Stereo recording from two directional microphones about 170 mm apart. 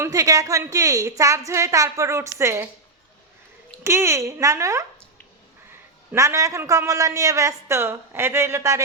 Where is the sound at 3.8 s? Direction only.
15° right (ahead or behind).